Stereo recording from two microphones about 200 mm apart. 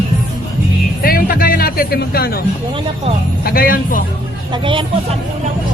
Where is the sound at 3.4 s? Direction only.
45° left (ahead or behind).